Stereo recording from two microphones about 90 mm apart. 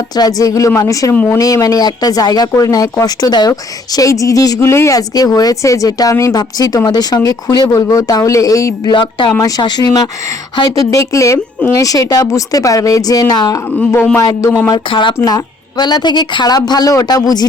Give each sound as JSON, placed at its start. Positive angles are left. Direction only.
{"t": 0.2, "sound": "speech", "side_deg": 40}
{"t": 1.1, "sound": "speech", "side_deg": 20}
{"t": 1.4, "sound": "speech", "side_deg": 40}
{"t": 4.7, "sound": "speech", "side_deg": 30}
{"t": 4.9, "sound": "speech", "side_deg": 45}
{"t": 8.9, "sound": "speech", "side_deg": 60}
{"t": 9.4, "sound": "speech", "side_deg": 50}
{"t": 10.6, "sound": "speech", "side_deg": 40}
{"t": 14.8, "sound": "speech", "side_deg": 70}
{"t": 15.8, "sound": "speech", "side_deg": 55}